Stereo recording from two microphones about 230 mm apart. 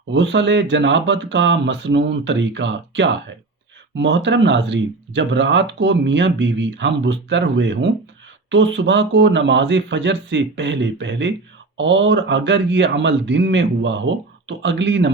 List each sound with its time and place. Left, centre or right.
0.1 s speech: right